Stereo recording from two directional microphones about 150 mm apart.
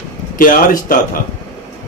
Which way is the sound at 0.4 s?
70° left (ahead or behind).